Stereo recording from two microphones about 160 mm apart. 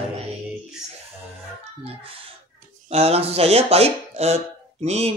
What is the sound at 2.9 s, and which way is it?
Speech, 40° right (ahead or behind).